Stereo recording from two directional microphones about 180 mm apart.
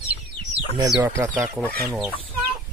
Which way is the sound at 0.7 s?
20° right (ahead or behind).